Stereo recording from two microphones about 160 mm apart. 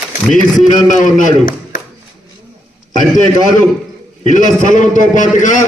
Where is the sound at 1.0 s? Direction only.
55° left (ahead or behind).